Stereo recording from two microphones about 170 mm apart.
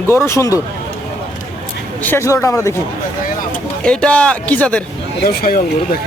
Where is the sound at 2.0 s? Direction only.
15° left (ahead or behind).